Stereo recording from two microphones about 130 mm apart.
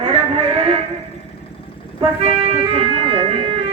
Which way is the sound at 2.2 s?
50° right (ahead or behind).